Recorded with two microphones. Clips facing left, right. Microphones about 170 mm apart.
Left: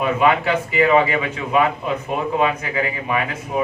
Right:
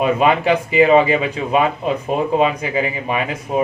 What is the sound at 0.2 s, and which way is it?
Speech, 25° right (ahead or behind).